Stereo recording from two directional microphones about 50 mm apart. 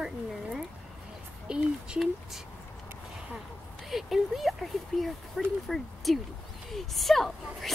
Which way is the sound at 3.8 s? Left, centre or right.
Centre.